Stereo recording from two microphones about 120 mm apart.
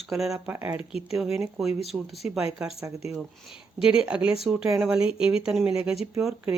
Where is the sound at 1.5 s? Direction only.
Centre (ahead or behind).